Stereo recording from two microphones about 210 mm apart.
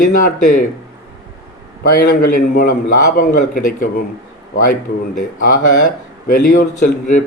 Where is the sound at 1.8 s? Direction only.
45° left (ahead or behind).